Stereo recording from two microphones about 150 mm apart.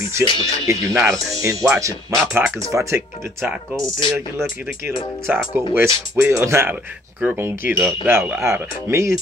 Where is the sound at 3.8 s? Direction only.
20° right (ahead or behind).